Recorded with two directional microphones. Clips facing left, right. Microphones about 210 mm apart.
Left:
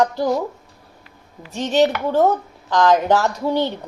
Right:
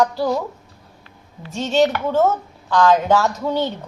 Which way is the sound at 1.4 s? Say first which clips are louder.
Even; 15° left (ahead or behind).